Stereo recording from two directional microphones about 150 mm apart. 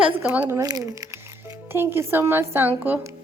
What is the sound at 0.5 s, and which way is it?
A woman's voice, 25° right (ahead or behind).